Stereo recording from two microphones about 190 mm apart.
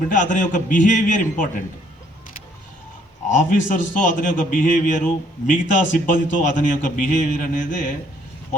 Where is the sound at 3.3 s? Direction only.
40° left (ahead or behind).